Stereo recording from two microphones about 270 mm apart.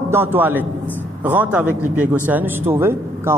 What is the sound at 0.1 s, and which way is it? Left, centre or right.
A man's voice, centre.